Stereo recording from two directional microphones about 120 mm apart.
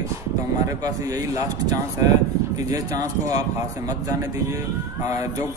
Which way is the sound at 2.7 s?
30° right (ahead or behind).